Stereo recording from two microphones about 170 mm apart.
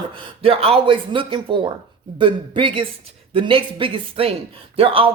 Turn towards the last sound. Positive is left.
turn(degrees=-35)  # may be behind; listen again after turning